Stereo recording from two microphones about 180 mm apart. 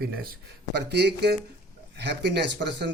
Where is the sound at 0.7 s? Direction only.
70° right (ahead or behind).